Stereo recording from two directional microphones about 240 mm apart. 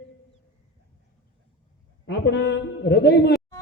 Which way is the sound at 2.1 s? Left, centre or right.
Left.